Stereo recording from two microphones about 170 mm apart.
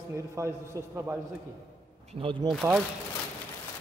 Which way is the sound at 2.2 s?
30° right (ahead or behind).